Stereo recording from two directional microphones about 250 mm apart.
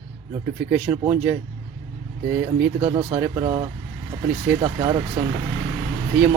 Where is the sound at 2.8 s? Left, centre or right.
Centre.